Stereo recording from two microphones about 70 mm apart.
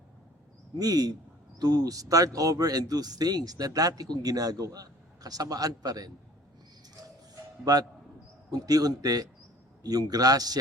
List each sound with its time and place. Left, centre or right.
0.8 s speech: right
7.6 s a man's voice: right